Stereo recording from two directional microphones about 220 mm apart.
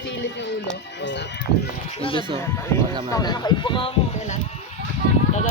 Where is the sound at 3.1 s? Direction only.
15° left (ahead or behind).